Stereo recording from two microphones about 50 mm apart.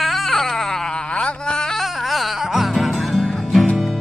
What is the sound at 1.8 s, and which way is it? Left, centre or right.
Music, centre.